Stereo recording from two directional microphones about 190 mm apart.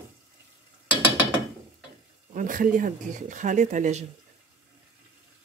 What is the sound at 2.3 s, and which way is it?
Speech, 45° right (ahead or behind).